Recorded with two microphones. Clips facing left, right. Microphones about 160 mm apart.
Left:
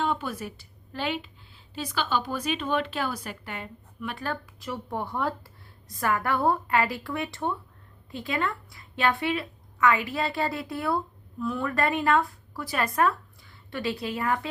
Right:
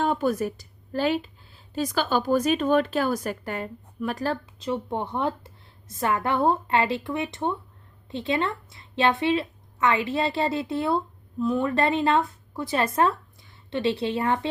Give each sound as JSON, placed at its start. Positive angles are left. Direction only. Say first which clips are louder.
{"t": 0.0, "sound": "a woman's voice", "louder": "right 6 dB", "side_deg": -45}
{"t": 4.6, "sound": "speech", "louder": "right 5 dB", "side_deg": -20}